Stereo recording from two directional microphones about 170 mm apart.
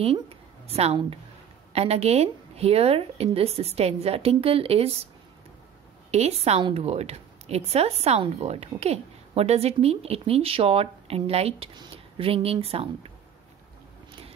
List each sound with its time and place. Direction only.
0.0 s a woman's voice: 35° right (ahead or behind)
6.1 s a woman's voice: 40° right (ahead or behind)